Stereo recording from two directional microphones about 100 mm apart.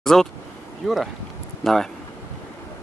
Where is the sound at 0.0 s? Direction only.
5° left (ahead or behind).